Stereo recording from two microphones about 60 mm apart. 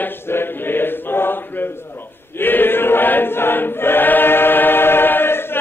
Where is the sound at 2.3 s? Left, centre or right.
Left.